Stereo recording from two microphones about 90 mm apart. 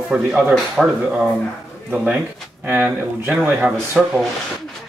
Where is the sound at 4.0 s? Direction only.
5° right (ahead or behind).